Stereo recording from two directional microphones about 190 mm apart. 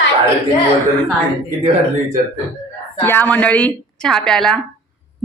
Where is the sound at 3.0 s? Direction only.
10° left (ahead or behind).